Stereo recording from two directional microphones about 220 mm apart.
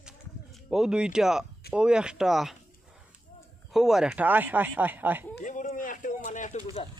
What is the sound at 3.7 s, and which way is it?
Speech, centre (ahead or behind).